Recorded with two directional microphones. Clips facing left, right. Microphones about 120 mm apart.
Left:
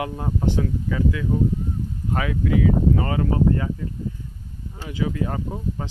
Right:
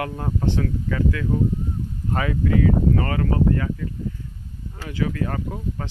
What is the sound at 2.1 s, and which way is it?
Speech, centre (ahead or behind).